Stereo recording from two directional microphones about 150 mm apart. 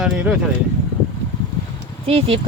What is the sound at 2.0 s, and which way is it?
Speech, 40° right (ahead or behind).